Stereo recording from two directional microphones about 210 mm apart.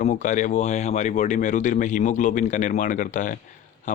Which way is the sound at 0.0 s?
35° left (ahead or behind).